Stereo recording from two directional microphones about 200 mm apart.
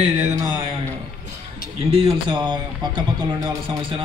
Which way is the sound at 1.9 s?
30° right (ahead or behind).